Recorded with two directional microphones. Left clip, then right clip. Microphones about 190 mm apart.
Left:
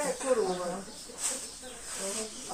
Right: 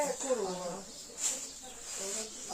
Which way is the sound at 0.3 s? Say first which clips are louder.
Left 7 dB; 15° right (ahead or behind).